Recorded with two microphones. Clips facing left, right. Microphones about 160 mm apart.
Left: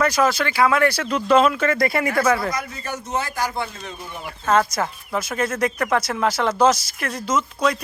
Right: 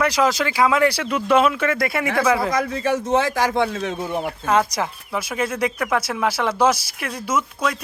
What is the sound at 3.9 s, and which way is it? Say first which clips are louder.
Speech: right 10 dB; 55° right (ahead or behind).